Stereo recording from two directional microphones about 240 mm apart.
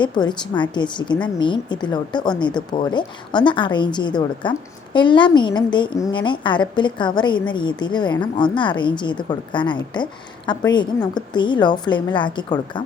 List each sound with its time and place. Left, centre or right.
0.0 s a woman's voice: centre